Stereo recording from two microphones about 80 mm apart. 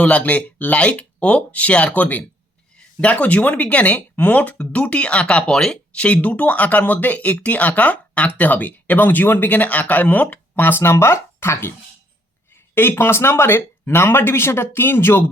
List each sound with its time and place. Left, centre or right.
0.0 s speech: centre
12.7 s speech: left